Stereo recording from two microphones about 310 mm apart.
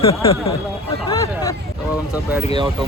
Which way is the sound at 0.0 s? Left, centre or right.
Centre.